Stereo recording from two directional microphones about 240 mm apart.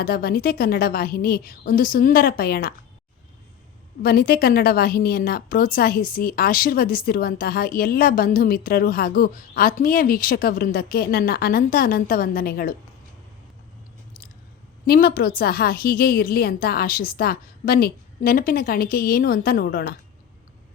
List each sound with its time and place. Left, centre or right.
0.0 s a woman's voice: left
4.0 s a woman's voice: left
14.8 s a woman's voice: left